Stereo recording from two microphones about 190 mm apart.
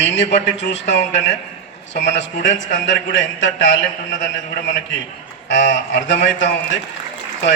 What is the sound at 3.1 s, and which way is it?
Speech, 75° left (ahead or behind).